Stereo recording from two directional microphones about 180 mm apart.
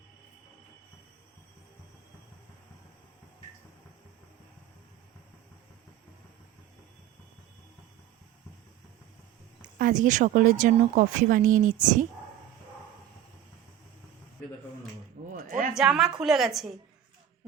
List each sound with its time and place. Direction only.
9.6 s speech: 50° right (ahead or behind)
15.3 s a sound: 50° right (ahead or behind)
15.7 s a woman's voice: 5° right (ahead or behind)